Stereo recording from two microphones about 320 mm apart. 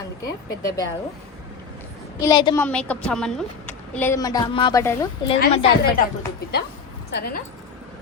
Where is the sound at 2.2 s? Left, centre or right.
Centre.